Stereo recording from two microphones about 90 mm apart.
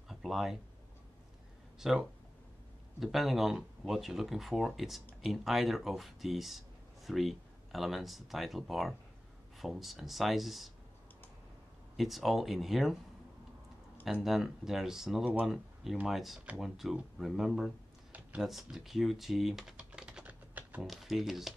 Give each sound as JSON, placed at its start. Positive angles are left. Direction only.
{"t": 0.1, "sound": "a sound", "side_deg": 0}
{"t": 1.8, "sound": "speech", "side_deg": -5}
{"t": 12.0, "sound": "speech", "side_deg": 0}
{"t": 14.2, "sound": "speech", "side_deg": 0}
{"t": 20.2, "sound": "typing", "side_deg": -15}
{"t": 20.8, "sound": "speech", "side_deg": 0}